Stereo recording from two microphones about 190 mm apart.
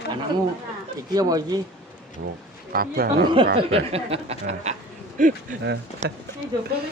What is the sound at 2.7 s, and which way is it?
Speech, 50° right (ahead or behind).